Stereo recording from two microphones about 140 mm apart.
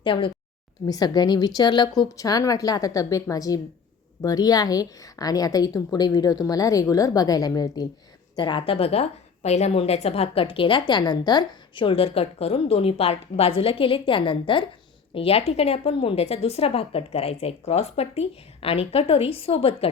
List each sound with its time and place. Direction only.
0.0 s a woman's voice: 35° left (ahead or behind)